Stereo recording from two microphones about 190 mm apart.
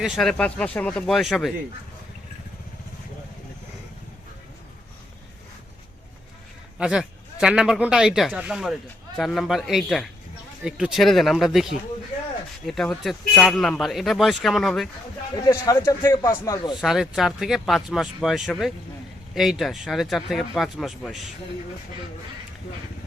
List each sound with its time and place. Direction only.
0.0 s speech: centre (ahead or behind)
6.7 s speech: 5° right (ahead or behind)
15.4 s a man's voice: 20° left (ahead or behind)
16.8 s speech: centre (ahead or behind)